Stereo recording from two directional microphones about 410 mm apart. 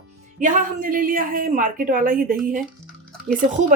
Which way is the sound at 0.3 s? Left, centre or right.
Centre.